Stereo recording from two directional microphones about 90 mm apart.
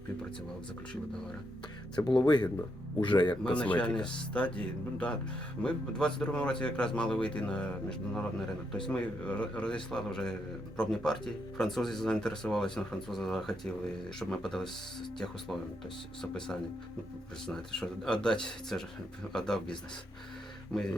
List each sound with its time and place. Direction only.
2.0 s speech: 55° left (ahead or behind)
3.4 s a man's voice: 15° left (ahead or behind)
16.2 s a man's voice: 5° left (ahead or behind)